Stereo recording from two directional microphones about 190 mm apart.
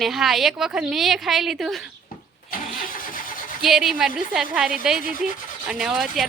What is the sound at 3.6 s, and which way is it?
A woman's voice, centre (ahead or behind).